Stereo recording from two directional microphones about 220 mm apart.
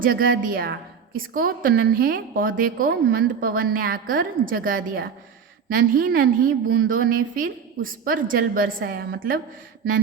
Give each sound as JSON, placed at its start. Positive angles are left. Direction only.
{"t": 0.0, "sound": "a woman's voice", "side_deg": -40}